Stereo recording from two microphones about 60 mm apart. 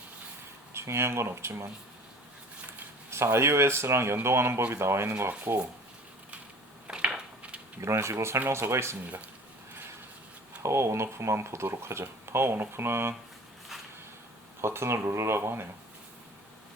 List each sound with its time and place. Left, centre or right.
0.7 s speech: right
3.1 s speech: right
5.5 s speech: right
6.8 s a sound: centre
7.8 s speech: right
10.6 s speech: right
14.6 s speech: right